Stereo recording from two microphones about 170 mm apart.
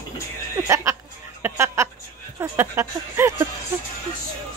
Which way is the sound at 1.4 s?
15° right (ahead or behind).